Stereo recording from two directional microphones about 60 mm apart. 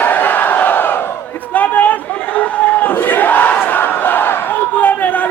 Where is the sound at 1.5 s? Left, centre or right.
Left.